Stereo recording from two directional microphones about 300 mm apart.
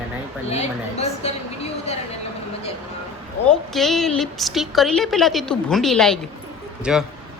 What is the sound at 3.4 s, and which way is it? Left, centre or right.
A woman's voice, centre.